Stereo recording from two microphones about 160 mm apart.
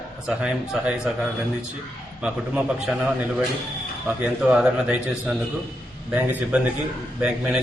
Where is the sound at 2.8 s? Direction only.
5° right (ahead or behind).